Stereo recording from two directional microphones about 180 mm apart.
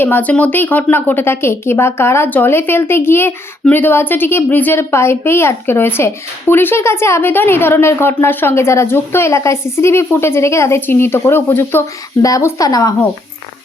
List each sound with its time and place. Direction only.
0.0 s a woman's voice: 10° left (ahead or behind)